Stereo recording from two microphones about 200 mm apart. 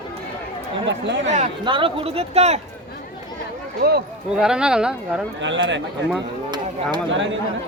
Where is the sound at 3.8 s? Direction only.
50° right (ahead or behind).